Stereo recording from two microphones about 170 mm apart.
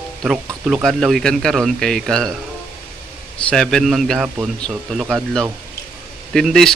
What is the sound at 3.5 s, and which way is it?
Speech, 5° left (ahead or behind).